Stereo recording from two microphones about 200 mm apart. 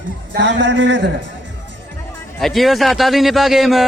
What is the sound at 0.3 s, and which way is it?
Speech, 65° right (ahead or behind).